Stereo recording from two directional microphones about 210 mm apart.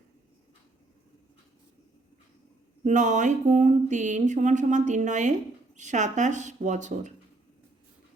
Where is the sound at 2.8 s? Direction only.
35° right (ahead or behind).